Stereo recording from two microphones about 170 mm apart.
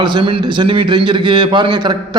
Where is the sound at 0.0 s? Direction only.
25° right (ahead or behind).